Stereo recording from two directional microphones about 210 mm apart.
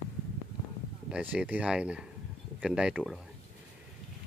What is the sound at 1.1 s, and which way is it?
Speech, 5° right (ahead or behind).